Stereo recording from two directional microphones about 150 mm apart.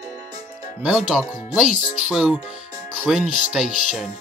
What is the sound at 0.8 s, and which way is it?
Speech, 5° right (ahead or behind).